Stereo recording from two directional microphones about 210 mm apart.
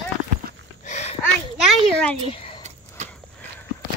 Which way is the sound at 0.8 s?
30° left (ahead or behind).